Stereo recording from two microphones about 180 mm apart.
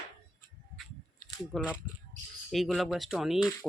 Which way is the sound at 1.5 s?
5° right (ahead or behind).